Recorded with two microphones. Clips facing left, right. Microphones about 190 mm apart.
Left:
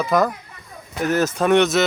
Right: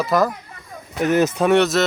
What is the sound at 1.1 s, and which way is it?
Speech, 15° right (ahead or behind).